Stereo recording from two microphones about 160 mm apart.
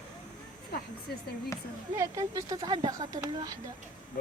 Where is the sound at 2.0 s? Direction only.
20° right (ahead or behind).